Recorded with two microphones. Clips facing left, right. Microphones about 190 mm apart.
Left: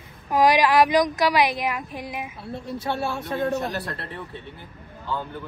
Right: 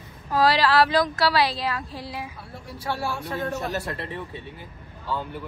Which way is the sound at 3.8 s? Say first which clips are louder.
Right 2 dB; 15° right (ahead or behind).